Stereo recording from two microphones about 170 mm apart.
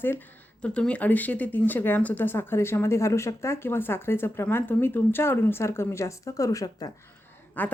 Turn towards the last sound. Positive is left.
turn(degrees=10)  # may be behind; listen again after turning